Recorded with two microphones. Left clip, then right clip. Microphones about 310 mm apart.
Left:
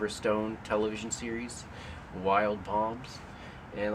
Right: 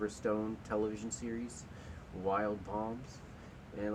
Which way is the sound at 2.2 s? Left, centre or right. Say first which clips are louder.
Left 7 dB; left.